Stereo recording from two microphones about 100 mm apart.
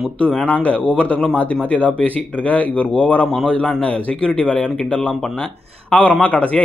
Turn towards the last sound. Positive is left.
turn(degrees=15)  # may be behind; listen again after turning